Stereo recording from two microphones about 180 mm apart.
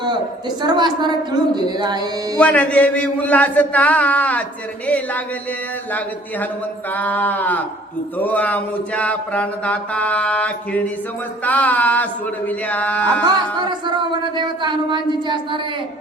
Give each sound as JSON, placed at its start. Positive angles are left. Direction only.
{"t": 0.6, "sound": "speech", "side_deg": -25}
{"t": 2.4, "sound": "mantra", "side_deg": 5}
{"t": 6.9, "sound": "mantra", "side_deg": 10}
{"t": 13.7, "sound": "speech", "side_deg": -25}